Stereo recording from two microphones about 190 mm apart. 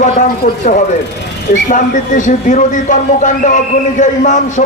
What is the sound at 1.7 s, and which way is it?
A man's voice, 40° left (ahead or behind).